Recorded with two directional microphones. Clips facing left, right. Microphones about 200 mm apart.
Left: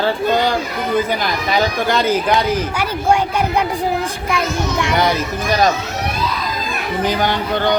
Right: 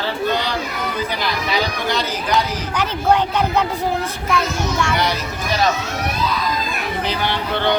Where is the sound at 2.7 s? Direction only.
10° left (ahead or behind).